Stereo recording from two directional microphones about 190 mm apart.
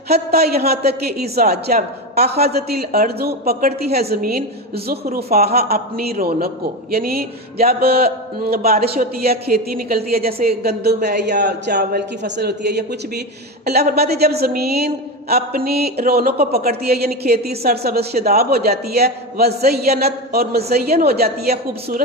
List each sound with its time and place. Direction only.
0.1 s a woman's voice: 55° right (ahead or behind)